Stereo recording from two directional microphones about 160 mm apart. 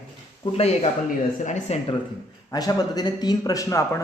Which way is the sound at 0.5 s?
40° left (ahead or behind).